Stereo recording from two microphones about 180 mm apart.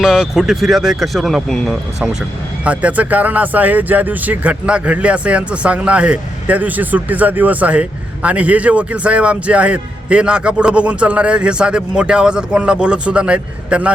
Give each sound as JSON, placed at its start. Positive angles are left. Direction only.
{"t": 0.0, "sound": "speech", "side_deg": -5}